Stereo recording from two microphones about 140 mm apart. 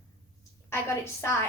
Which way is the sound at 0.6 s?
20° left (ahead or behind).